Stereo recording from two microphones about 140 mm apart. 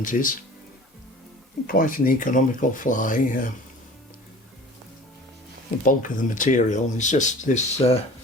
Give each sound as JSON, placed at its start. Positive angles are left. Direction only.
{"t": 0.0, "sound": "speech", "side_deg": 75}
{"t": 1.6, "sound": "speech", "side_deg": 85}
{"t": 5.8, "sound": "speech", "side_deg": 75}